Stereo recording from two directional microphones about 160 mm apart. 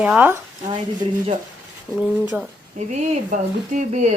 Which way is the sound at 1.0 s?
30° right (ahead or behind).